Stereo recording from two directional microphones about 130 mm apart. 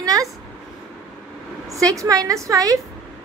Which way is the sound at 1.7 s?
25° right (ahead or behind).